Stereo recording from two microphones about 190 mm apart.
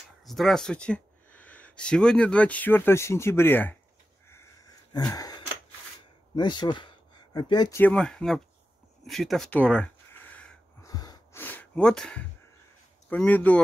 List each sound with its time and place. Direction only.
0.2 s speech: centre (ahead or behind)
4.3 s wheeze: 15° left (ahead or behind)
6.3 s speech: 25° left (ahead or behind)
7.8 s speech: 5° left (ahead or behind)
9.0 s gasp: centre (ahead or behind)
10.9 s a sound: 20° left (ahead or behind)
11.4 s a sound: 5° left (ahead or behind)
13.1 s speech: 10° left (ahead or behind)